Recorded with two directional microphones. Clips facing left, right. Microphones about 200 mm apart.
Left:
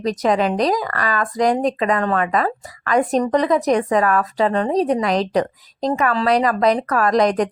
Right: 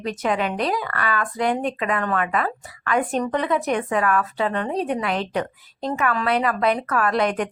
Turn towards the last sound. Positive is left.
turn(degrees=40)  # may be behind; listen again after turning